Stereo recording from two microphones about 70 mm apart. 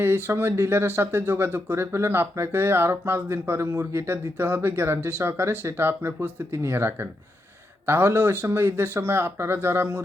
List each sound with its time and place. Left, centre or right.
0.0 s speech: right